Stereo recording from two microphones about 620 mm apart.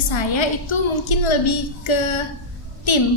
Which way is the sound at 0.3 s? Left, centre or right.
Left.